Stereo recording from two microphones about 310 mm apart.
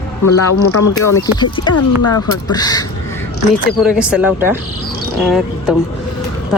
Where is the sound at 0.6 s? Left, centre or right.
Left.